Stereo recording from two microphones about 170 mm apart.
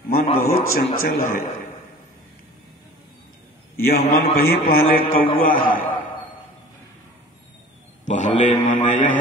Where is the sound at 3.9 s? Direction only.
60° left (ahead or behind).